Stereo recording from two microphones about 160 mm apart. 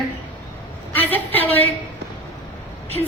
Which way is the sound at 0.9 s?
10° left (ahead or behind).